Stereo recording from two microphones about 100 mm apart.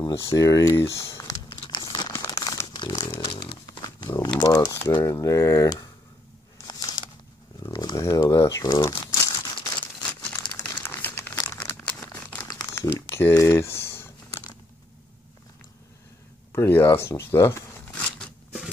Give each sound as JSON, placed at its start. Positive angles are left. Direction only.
{"t": 0.1, "sound": "speech", "side_deg": 30}
{"t": 1.5, "sound": "crumpling", "side_deg": 50}
{"t": 3.1, "sound": "a sound", "side_deg": 50}
{"t": 4.4, "sound": "speech", "side_deg": 40}
{"t": 6.7, "sound": "a sound", "side_deg": 40}
{"t": 8.7, "sound": "crumpling", "side_deg": 35}
{"t": 10.0, "sound": "crumpling", "side_deg": 15}
{"t": 13.5, "sound": "a sound", "side_deg": 25}
{"t": 16.5, "sound": "speech", "side_deg": 25}